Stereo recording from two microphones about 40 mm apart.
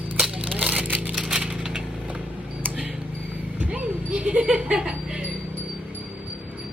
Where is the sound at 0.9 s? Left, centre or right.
Right.